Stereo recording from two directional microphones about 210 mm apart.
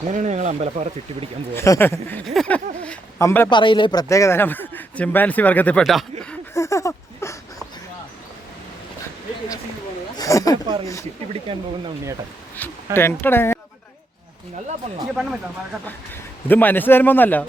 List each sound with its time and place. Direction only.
0.1 s speech: 35° right (ahead or behind)
1.5 s a man's voice: 15° left (ahead or behind)
3.6 s speech: 25° left (ahead or behind); by 6.1 s centre (ahead or behind)
6.5 s a sound: 15° left (ahead or behind)
10.2 s speech: 15° left (ahead or behind)
11.5 s speech: 25° right (ahead or behind)
12.5 s speech: 10° left (ahead or behind)
15.1 s speech: 5° right (ahead or behind)
16.5 s speech: 10° left (ahead or behind)